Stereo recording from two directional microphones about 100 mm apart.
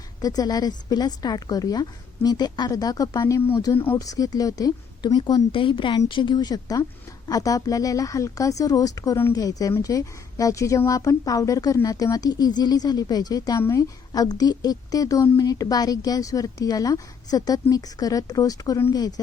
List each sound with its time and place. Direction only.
0.2 s a woman's voice: 40° left (ahead or behind)